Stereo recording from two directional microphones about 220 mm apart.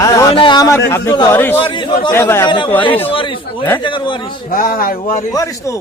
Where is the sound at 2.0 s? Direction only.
10° left (ahead or behind).